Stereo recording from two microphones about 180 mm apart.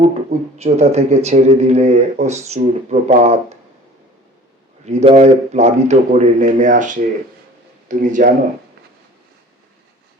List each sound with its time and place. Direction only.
0.0 s speech: 40° right (ahead or behind)
4.9 s speech: 35° right (ahead or behind)